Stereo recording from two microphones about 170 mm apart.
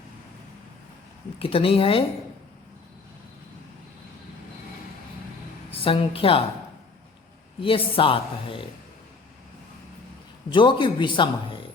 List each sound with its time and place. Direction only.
1.4 s speech: 35° left (ahead or behind)
5.7 s a woman's voice: 35° left (ahead or behind)
7.6 s speech: 30° left (ahead or behind)
10.5 s a man's voice: 30° left (ahead or behind)